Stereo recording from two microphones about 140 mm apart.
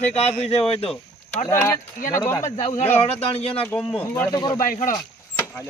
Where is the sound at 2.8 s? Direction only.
45° left (ahead or behind).